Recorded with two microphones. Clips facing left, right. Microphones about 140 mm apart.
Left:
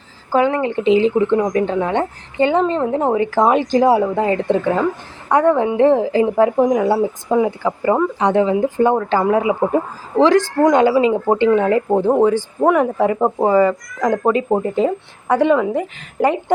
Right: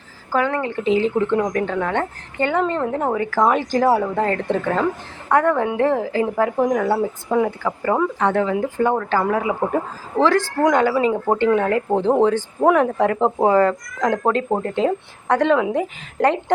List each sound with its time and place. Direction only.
0.3 s a woman's voice: 20° left (ahead or behind); by 16.4 s 5° left (ahead or behind)